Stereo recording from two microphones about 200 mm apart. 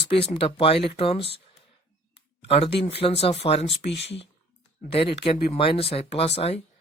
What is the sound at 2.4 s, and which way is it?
Speech, 30° left (ahead or behind).